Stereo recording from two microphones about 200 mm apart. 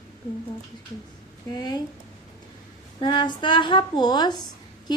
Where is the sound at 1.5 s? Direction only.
20° left (ahead or behind).